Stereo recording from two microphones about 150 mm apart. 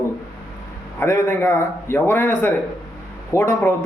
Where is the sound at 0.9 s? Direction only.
15° left (ahead or behind).